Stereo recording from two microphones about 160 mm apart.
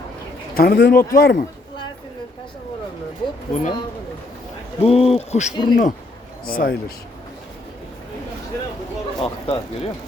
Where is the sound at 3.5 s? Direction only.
50° left (ahead or behind).